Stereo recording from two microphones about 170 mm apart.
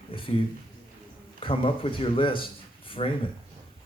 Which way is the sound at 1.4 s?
30° left (ahead or behind).